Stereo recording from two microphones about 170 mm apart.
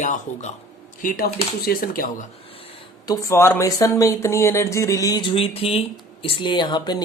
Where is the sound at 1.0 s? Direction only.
60° left (ahead or behind).